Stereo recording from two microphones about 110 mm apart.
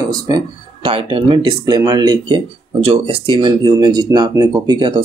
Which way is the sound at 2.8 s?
55° right (ahead or behind).